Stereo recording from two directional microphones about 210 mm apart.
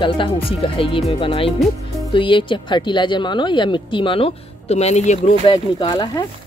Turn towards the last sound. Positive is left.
turn(degrees=20)  # may be behind; listen again after turning